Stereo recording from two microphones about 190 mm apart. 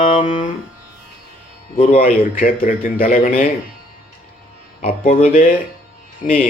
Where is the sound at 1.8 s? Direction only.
45° left (ahead or behind).